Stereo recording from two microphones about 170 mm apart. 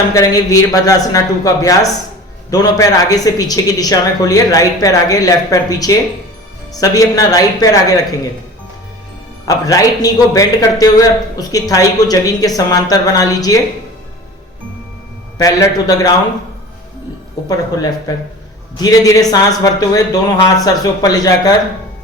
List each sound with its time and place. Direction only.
0.1 s a man's voice: 20° left (ahead or behind)
9.5 s a man's voice: 20° left (ahead or behind)
15.4 s a man's voice: 20° left (ahead or behind)
17.4 s a man's voice: 20° left (ahead or behind)